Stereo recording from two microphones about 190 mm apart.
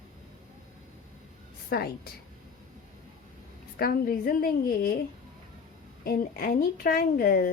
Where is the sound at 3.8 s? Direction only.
50° left (ahead or behind).